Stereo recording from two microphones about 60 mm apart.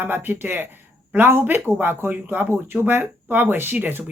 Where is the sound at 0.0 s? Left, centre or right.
Right.